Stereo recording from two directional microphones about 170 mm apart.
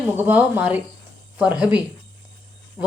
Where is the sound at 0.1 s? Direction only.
10° right (ahead or behind).